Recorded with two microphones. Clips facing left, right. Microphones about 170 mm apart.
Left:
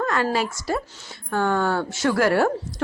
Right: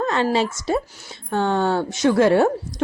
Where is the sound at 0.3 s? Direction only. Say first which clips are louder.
Right 4 dB; 20° right (ahead or behind).